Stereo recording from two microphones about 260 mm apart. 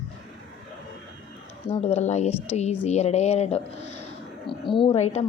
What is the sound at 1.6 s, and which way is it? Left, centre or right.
Speech, left.